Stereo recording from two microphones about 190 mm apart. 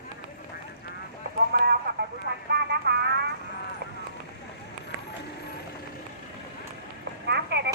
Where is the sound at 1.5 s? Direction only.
55° right (ahead or behind).